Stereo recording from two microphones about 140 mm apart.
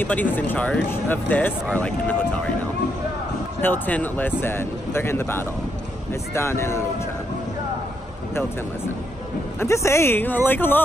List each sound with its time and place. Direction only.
0.0 s speech: 15° left (ahead or behind)
3.6 s speech: 15° left (ahead or behind)
9.6 s speech: 20° left (ahead or behind)